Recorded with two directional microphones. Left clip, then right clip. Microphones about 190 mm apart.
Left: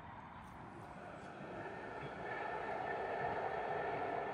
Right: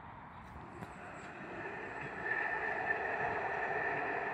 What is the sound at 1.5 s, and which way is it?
Train, 30° left (ahead or behind).